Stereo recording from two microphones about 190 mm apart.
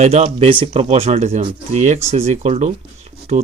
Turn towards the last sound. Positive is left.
turn(degrees=-35)  # may be behind; listen again after turning